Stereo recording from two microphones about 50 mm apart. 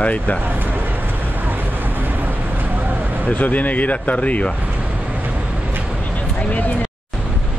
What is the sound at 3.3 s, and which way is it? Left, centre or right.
Speech, left.